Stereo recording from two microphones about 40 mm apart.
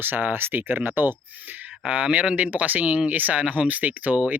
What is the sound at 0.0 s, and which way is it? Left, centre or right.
Speech, right.